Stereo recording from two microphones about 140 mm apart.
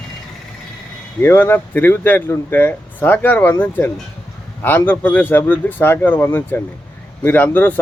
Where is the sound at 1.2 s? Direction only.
15° left (ahead or behind).